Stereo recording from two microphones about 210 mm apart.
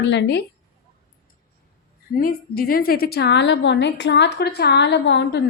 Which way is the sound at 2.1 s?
45° left (ahead or behind).